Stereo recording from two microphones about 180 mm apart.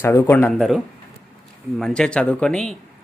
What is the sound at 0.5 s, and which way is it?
Speech, centre (ahead or behind).